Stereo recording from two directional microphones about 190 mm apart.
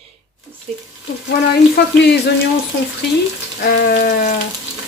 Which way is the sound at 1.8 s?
55° left (ahead or behind).